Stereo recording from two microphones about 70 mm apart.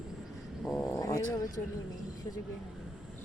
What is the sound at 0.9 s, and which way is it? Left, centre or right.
Speech, left.